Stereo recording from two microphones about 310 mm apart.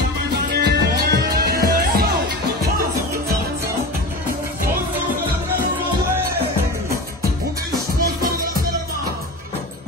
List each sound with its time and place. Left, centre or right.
0.6 s music: right
8.0 s music: right